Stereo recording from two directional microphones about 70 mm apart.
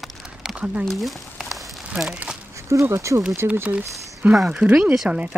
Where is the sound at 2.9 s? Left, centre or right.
Right.